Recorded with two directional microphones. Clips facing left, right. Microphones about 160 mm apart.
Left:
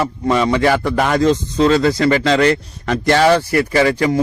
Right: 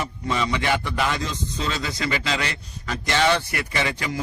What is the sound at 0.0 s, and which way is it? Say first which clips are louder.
Speech: left 10 dB; 60° left (ahead or behind).